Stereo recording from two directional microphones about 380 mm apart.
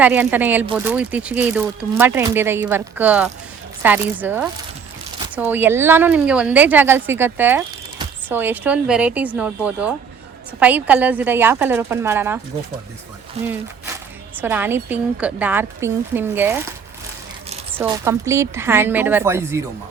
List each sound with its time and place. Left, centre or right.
0.0 s speech: centre
14.4 s speech: centre
17.7 s speech: centre